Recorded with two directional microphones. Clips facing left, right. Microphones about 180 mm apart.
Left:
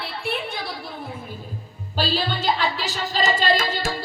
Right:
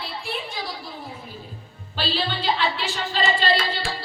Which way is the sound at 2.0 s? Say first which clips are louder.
Left 2 dB; 40° left (ahead or behind).